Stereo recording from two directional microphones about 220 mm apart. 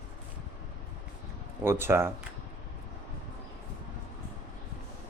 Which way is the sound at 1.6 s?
10° right (ahead or behind).